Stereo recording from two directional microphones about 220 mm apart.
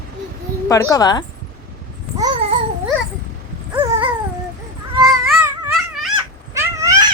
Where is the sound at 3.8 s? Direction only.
25° right (ahead or behind).